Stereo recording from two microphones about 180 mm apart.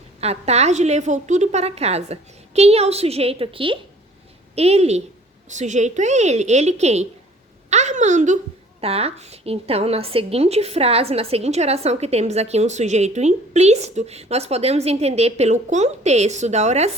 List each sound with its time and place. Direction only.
0.2 s a woman's voice: 35° right (ahead or behind)